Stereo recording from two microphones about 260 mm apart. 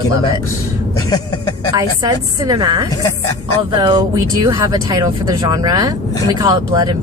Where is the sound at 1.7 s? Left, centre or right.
Centre.